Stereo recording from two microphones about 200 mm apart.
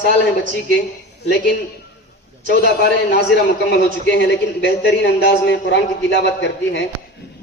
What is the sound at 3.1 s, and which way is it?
A man's voice, 55° left (ahead or behind).